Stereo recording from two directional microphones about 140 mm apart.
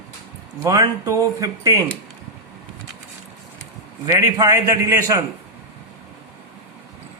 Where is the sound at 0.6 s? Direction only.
20° right (ahead or behind).